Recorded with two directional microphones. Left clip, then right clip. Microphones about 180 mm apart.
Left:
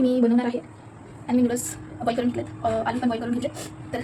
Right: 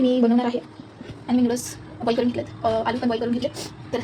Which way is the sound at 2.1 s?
15° right (ahead or behind).